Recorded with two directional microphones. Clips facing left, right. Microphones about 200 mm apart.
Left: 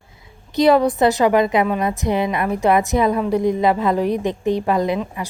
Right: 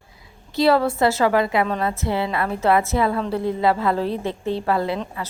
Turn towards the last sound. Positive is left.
turn(degrees=15)  # may be behind; listen again after turning